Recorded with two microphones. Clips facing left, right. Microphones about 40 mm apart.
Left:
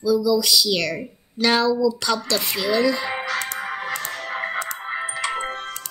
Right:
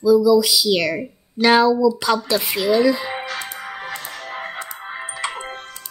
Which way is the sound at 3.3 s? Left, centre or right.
Left.